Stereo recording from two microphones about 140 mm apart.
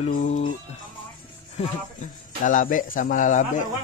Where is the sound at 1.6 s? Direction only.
65° left (ahead or behind).